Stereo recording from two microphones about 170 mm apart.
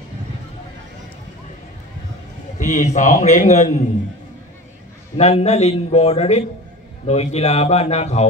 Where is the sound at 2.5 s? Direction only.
45° left (ahead or behind).